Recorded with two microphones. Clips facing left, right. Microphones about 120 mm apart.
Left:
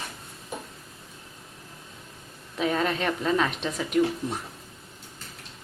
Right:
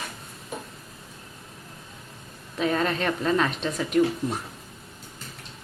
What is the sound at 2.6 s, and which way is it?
A woman's voice, 10° left (ahead or behind).